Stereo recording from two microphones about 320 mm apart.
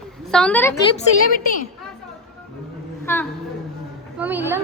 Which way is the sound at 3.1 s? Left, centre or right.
Centre.